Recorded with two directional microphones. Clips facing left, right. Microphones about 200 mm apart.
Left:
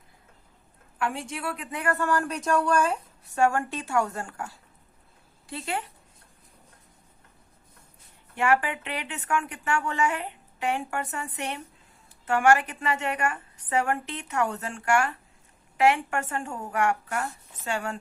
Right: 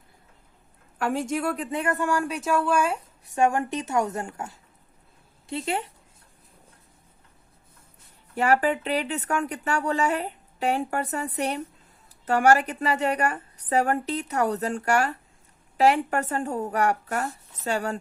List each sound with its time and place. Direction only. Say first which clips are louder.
0.9 s speech: right 6 dB; 40° right (ahead or behind)
1.8 s a woman's voice: left 1 dB; 15° right (ahead or behind)
8.4 s speech: right 3 dB; 40° right (ahead or behind)